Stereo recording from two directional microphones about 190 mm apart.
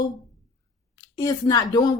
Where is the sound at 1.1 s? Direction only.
20° left (ahead or behind).